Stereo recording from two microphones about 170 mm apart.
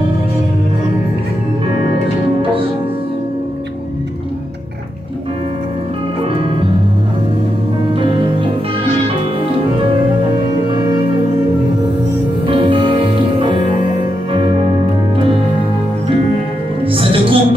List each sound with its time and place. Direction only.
6.3 s music: 30° right (ahead or behind)
7.9 s music: 30° right (ahead or behind)
12.4 s music: 30° right (ahead or behind)
16.8 s music: 30° right (ahead or behind)